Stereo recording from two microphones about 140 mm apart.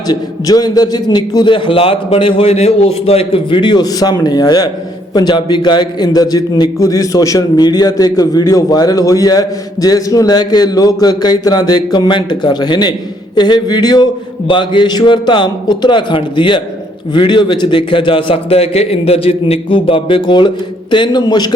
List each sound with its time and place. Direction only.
0.1 s a man's voice: 30° left (ahead or behind)